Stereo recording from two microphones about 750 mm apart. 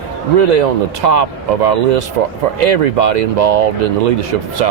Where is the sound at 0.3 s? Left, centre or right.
Right.